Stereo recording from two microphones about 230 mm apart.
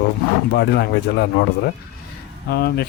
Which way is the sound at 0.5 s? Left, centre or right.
Left.